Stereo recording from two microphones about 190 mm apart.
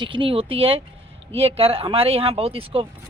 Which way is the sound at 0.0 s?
25° right (ahead or behind).